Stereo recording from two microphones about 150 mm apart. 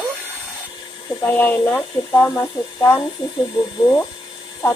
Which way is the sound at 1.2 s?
10° left (ahead or behind).